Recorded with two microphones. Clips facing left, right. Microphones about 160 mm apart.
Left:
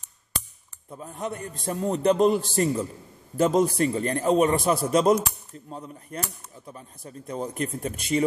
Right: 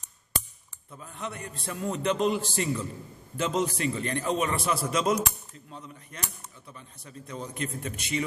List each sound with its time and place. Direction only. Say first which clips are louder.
0.8 s a man's voice: left 6 dB; 35° left (ahead or behind)